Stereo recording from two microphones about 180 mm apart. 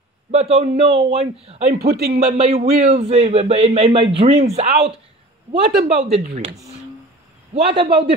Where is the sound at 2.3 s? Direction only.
35° right (ahead or behind).